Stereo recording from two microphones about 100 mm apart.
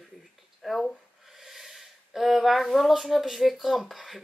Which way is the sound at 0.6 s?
Centre (ahead or behind).